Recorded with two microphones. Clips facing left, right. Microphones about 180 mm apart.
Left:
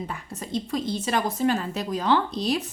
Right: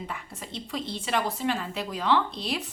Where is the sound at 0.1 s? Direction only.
40° left (ahead or behind).